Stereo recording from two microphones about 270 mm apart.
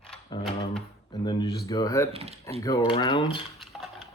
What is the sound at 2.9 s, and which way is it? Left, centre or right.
Speech, centre.